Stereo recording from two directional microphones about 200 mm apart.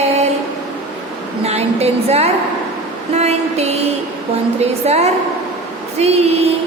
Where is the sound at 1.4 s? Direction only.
30° right (ahead or behind).